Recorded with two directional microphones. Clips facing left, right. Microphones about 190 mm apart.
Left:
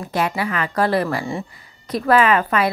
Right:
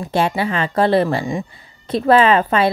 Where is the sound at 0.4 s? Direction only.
25° right (ahead or behind).